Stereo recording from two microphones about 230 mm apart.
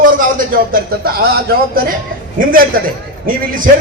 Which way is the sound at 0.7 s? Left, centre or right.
Right.